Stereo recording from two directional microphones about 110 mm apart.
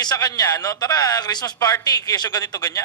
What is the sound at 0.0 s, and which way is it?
A man's voice, 35° left (ahead or behind).